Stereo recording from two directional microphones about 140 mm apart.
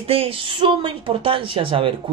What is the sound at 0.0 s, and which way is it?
Speech, 45° right (ahead or behind).